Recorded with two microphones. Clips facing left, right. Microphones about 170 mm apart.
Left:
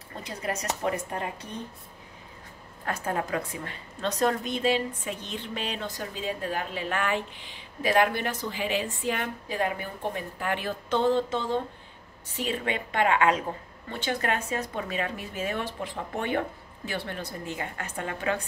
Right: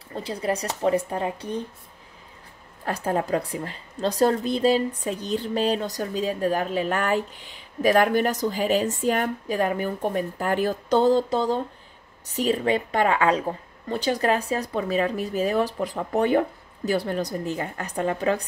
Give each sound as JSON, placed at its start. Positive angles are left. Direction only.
{"t": 0.1, "sound": "a woman's voice", "side_deg": -30}
{"t": 2.8, "sound": "a woman's voice", "side_deg": -35}